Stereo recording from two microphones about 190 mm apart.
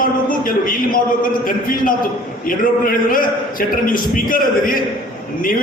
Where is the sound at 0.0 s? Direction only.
45° left (ahead or behind).